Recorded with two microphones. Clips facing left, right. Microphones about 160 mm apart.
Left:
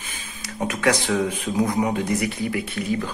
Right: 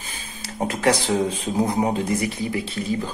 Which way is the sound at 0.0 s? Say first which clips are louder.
Right 1 dB; 30° right (ahead or behind).